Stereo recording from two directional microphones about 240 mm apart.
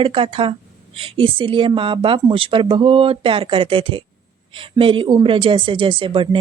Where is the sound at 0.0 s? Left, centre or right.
Right.